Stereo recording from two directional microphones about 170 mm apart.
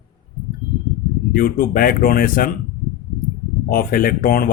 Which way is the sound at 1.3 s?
55° left (ahead or behind).